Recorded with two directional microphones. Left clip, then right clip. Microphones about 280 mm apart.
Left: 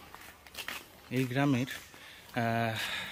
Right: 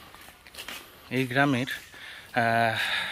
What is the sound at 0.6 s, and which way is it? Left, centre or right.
Speech, centre.